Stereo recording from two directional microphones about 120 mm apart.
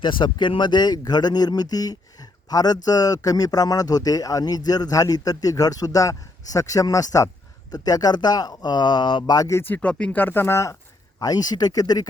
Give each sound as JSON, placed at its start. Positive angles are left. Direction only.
{"t": 0.0, "sound": "speech", "side_deg": 40}